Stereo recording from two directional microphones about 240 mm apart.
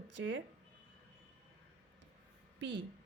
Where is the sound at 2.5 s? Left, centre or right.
Right.